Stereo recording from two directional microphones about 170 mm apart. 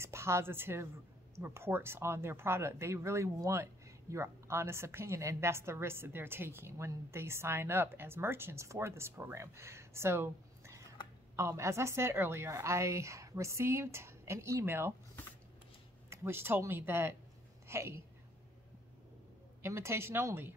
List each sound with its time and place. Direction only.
0.0 s speech: 15° right (ahead or behind)
16.1 s speech: 15° right (ahead or behind)
19.6 s speech: 15° right (ahead or behind)